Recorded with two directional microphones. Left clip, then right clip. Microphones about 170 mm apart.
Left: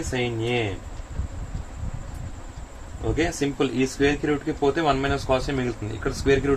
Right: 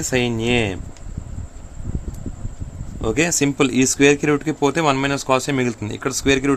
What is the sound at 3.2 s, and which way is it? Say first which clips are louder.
Speech: right 6 dB; 90° right.